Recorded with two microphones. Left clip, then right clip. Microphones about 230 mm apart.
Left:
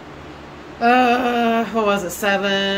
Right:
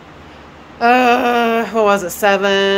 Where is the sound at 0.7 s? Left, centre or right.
Centre.